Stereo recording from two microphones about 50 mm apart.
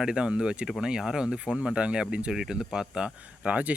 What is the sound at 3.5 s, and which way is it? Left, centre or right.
Speech, right.